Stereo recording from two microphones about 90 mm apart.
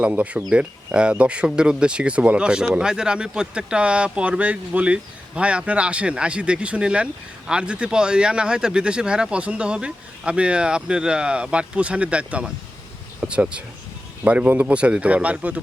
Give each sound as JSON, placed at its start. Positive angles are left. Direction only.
{"t": 0.0, "sound": "speech", "side_deg": -15}